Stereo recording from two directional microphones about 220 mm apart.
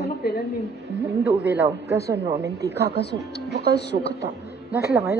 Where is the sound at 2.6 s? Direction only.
50° left (ahead or behind).